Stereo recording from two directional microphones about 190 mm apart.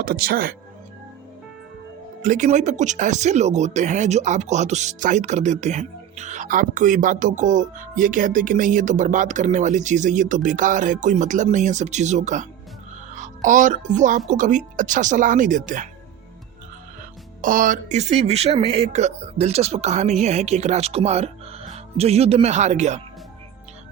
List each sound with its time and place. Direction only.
0.0 s speech: 50° right (ahead or behind)
2.2 s speech: 45° right (ahead or behind)
17.4 s speech: 45° right (ahead or behind)